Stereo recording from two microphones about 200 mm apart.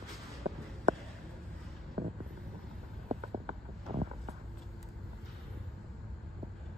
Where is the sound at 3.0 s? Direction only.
30° right (ahead or behind).